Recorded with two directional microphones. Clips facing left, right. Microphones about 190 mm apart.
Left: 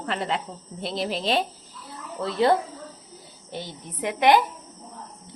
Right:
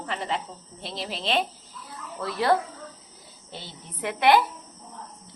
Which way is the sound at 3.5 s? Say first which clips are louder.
Left 6 dB; 15° left (ahead or behind).